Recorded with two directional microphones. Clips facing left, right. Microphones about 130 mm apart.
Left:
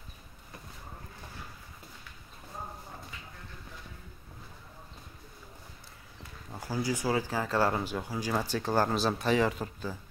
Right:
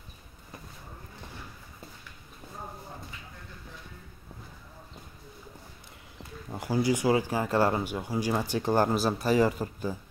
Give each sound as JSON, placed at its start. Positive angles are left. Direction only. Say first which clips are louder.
{"t": 6.5, "sound": "speech", "louder": "right 6 dB", "side_deg": -20}